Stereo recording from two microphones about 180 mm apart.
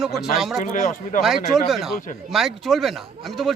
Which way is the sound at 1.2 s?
Centre (ahead or behind).